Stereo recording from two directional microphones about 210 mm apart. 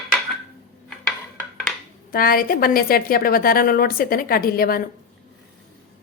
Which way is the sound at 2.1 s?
45° left (ahead or behind).